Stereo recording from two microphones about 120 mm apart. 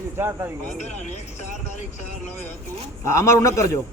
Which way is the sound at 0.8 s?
80° left.